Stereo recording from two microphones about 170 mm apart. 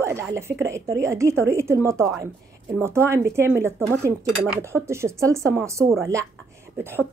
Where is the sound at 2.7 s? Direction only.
15° right (ahead or behind).